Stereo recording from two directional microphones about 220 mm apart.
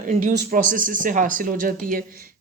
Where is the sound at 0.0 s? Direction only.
35° right (ahead or behind).